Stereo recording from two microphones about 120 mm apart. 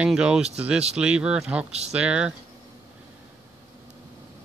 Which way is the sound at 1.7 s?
60° right (ahead or behind).